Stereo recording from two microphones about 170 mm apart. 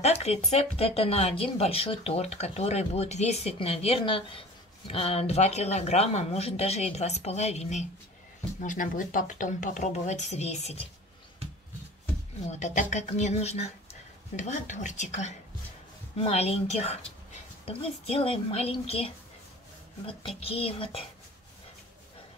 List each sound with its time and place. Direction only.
0.0 s speech: 40° left (ahead or behind)
12.4 s speech: 45° left (ahead or behind)